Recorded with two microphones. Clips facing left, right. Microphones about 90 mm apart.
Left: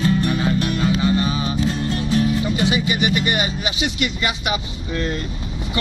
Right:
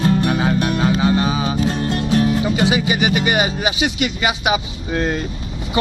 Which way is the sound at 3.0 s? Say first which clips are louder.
Right 3 dB; 90° right.